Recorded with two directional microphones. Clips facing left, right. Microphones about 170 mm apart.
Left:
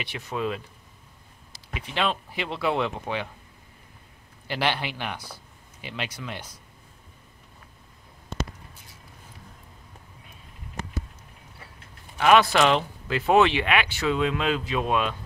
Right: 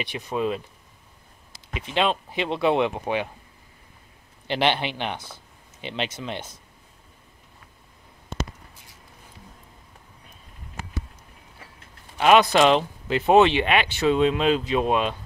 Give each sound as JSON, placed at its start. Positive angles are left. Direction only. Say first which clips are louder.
{"t": 0.0, "sound": "speech", "louder": "right 3 dB", "side_deg": -15}
{"t": 1.7, "sound": "speech", "louder": "right 4 dB", "side_deg": -20}
{"t": 4.5, "sound": "speech", "louder": "right 4 dB", "side_deg": -25}
{"t": 12.2, "sound": "speech", "louder": "right 2 dB", "side_deg": -20}